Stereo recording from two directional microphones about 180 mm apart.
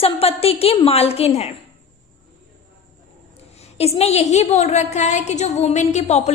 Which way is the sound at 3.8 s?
35° left (ahead or behind).